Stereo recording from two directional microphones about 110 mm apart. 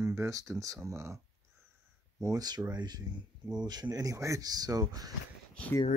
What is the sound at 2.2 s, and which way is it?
Speech, 35° right (ahead or behind).